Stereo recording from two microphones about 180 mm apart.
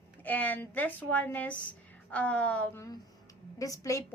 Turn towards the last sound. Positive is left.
turn(degrees=20)  # may be behind; listen again after turning